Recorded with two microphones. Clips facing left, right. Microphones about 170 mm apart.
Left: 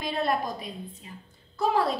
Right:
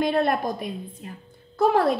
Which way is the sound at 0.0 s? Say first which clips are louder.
Right 6 dB; 55° right (ahead or behind).